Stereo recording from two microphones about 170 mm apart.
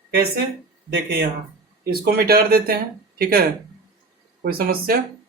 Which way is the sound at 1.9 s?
65° right (ahead or behind).